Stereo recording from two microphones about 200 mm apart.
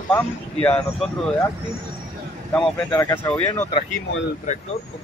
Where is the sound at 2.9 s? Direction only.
10° left (ahead or behind).